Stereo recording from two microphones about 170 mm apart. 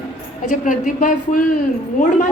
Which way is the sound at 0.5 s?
50° left (ahead or behind).